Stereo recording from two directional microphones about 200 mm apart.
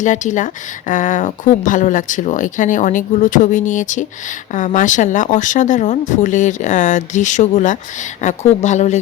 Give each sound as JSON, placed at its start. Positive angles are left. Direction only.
{"t": 0.0, "sound": "a woman's voice", "side_deg": 40}